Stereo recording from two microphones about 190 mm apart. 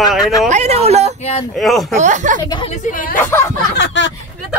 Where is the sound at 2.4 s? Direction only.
25° left (ahead or behind).